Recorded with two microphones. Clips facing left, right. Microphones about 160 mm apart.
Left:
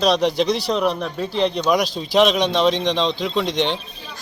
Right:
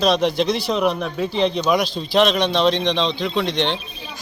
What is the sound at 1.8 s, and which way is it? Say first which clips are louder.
Speech: even; 40° left (ahead or behind).